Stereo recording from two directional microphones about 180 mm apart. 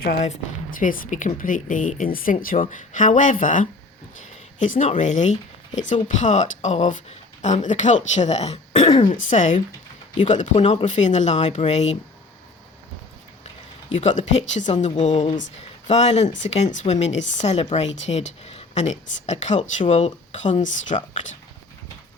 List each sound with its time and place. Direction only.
0.2 s speech: 45° left (ahead or behind)
14.0 s speech: 40° left (ahead or behind)